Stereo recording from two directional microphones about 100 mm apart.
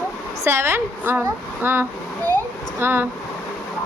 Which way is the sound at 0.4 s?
25° right (ahead or behind).